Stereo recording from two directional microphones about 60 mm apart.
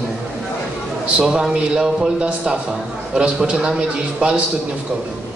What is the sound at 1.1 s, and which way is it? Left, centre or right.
A woman's voice, centre.